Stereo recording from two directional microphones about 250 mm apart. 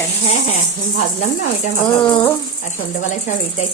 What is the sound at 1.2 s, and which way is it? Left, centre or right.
Speech, left.